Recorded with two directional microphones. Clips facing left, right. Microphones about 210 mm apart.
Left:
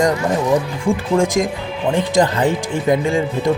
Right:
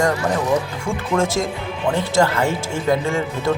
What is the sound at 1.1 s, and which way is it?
Speech, 15° left (ahead or behind).